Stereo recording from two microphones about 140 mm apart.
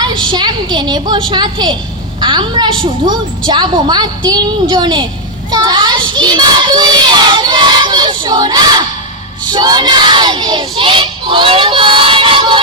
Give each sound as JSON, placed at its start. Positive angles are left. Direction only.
{"t": 0.0, "sound": "a woman's voice", "side_deg": -35}
{"t": 5.5, "sound": "child singing", "side_deg": -30}